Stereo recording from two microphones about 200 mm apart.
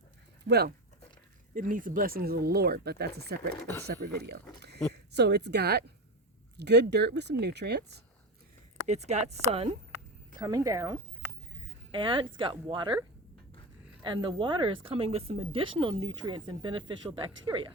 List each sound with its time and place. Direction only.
0.4 s speech: 50° right (ahead or behind)
1.5 s speech: 40° right (ahead or behind)
3.5 s speech: 10° left (ahead or behind)
3.8 s speech: 55° right (ahead or behind)
8.9 s speech: 35° right (ahead or behind)
10.3 s a woman's voice: 15° right (ahead or behind)
14.0 s speech: 25° right (ahead or behind)